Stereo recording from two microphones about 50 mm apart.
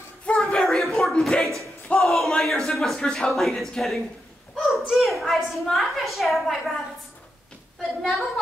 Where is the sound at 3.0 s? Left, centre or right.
Centre.